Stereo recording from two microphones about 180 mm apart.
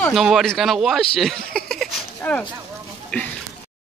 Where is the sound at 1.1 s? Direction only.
Centre (ahead or behind).